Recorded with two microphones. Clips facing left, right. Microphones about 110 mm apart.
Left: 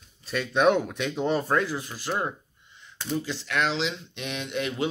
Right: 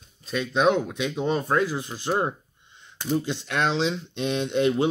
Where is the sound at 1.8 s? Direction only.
25° right (ahead or behind).